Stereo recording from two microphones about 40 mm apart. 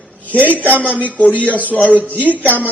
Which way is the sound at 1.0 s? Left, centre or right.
Left.